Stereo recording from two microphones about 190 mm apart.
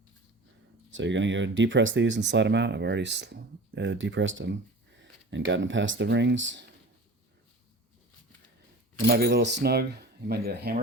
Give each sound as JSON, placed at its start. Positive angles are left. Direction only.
{"t": 0.9, "sound": "speech", "side_deg": -80}
{"t": 9.0, "sound": "speech", "side_deg": -55}